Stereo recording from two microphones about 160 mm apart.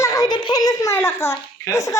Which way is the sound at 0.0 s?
20° left (ahead or behind).